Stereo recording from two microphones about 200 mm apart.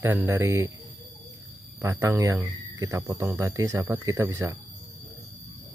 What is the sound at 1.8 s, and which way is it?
Speech, 15° right (ahead or behind).